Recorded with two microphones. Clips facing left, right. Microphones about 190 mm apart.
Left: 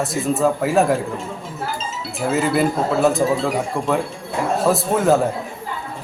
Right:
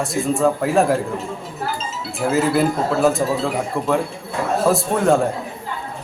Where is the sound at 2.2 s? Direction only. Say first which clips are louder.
Right 1 dB; centre (ahead or behind).